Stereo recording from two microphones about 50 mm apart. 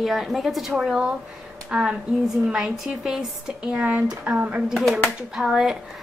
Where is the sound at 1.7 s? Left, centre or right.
Right.